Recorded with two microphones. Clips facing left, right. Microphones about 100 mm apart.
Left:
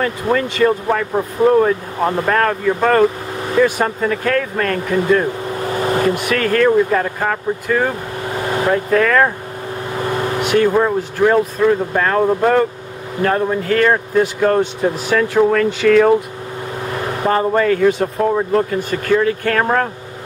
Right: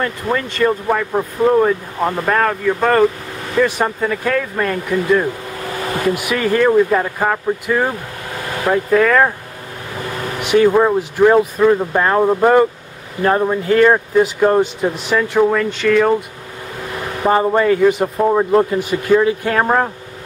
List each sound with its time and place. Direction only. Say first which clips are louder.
0.0 s speech: left 2 dB; centre (ahead or behind)
5.8 s vehicle: left 5 dB; 25° left (ahead or behind)
6.0 s speech: left 1 dB; 5° right (ahead or behind)
10.4 s speech: right 3 dB; 5° right (ahead or behind)
17.2 s speech: right 2 dB; 5° right (ahead or behind)
18.5 s speech: right 3 dB; 25° right (ahead or behind)
18.8 s speech: right 2 dB; 15° right (ahead or behind)